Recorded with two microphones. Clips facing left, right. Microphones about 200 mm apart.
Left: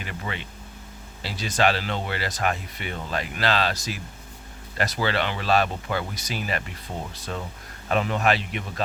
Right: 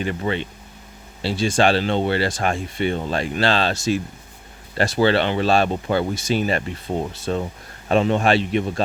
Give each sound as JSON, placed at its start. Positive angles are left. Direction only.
{"t": 0.0, "sound": "speech", "side_deg": -30}